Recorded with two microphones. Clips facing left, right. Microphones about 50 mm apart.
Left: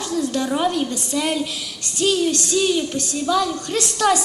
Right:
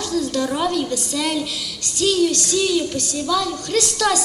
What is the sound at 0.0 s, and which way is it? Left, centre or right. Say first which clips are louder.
A woman's voice: right 1 dB; left.